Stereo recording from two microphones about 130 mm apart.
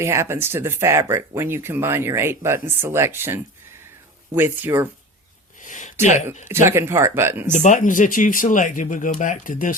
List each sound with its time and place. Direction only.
0.0 s speech: 20° right (ahead or behind)
5.6 s speech: 75° left (ahead or behind)
6.7 s speech: 20° right (ahead or behind)
7.5 s speech: 70° left (ahead or behind); by 9.7 s 90° left